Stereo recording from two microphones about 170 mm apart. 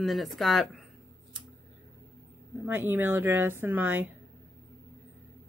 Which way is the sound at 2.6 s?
10° right (ahead or behind).